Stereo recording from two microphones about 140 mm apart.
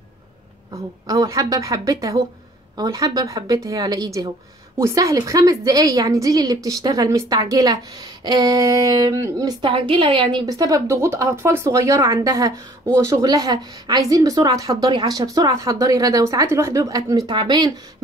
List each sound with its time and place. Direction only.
1.0 s a woman's voice: 25° right (ahead or behind)